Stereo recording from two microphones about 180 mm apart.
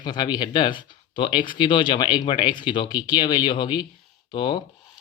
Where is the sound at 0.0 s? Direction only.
25° left (ahead or behind).